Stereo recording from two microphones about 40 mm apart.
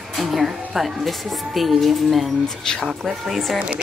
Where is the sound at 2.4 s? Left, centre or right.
Centre.